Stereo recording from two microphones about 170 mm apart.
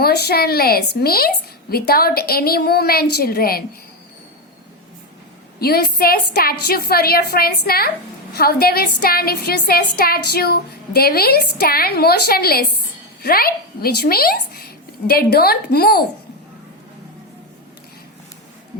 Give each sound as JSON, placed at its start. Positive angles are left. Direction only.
{"t": 0.0, "sound": "a woman's voice", "side_deg": 70}
{"t": 5.5, "sound": "a woman's voice", "side_deg": 65}